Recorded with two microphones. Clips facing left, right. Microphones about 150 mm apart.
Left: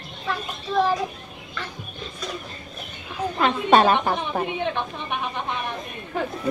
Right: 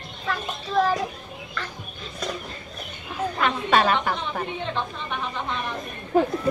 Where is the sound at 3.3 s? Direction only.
30° left (ahead or behind).